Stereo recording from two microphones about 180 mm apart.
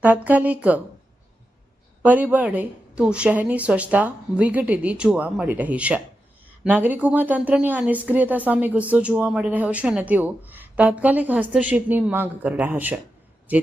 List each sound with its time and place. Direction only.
0.0 s speech: 10° right (ahead or behind)
2.0 s speech: 10° right (ahead or behind)